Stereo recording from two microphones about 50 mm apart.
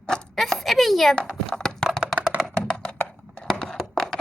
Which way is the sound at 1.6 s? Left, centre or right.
Centre.